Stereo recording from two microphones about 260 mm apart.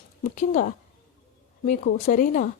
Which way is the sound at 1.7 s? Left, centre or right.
Left.